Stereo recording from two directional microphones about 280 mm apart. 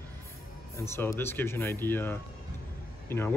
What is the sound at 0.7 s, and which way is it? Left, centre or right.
Speech, centre.